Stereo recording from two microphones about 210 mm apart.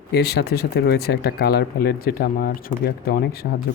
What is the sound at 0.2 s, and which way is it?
Speech, 50° left (ahead or behind).